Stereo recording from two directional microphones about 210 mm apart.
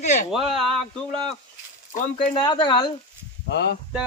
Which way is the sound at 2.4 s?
20° left (ahead or behind).